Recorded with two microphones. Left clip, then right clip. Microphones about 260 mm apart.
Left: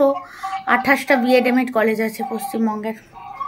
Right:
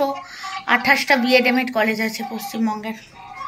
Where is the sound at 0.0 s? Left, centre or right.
Centre.